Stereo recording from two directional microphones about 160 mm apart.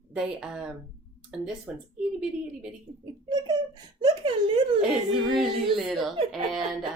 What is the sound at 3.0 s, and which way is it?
A child's voice, 25° right (ahead or behind).